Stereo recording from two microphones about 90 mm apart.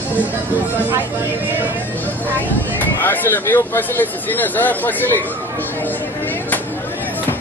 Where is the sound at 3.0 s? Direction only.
20° left (ahead or behind).